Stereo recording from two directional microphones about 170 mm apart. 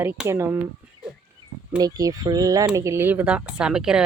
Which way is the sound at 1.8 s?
20° right (ahead or behind).